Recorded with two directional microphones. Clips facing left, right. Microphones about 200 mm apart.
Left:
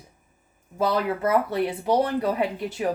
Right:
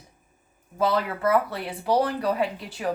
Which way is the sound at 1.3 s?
20° left (ahead or behind).